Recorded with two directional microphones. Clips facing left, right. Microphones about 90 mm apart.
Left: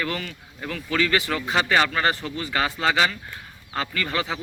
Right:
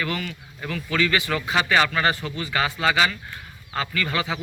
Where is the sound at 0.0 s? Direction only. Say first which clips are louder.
Right 1 dB; 35° left (ahead or behind).